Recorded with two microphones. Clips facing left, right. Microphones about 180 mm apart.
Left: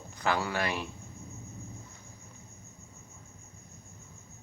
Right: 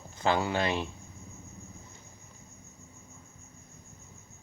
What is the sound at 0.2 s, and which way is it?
Speech, 25° right (ahead or behind).